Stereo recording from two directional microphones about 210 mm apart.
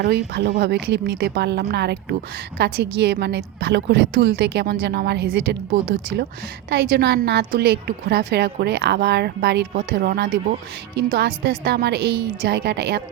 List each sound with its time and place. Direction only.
0.0 s a woman's voice: 50° right (ahead or behind)